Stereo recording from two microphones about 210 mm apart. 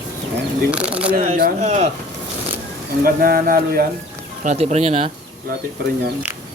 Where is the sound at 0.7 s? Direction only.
5° right (ahead or behind).